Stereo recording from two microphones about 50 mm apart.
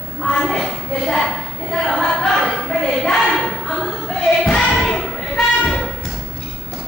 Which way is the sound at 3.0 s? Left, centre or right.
Centre.